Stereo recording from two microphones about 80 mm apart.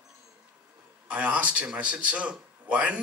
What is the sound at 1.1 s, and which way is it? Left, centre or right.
A man's voice, centre.